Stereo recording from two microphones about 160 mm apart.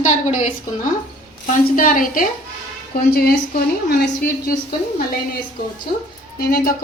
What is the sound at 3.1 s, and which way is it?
Speech, 70° left (ahead or behind).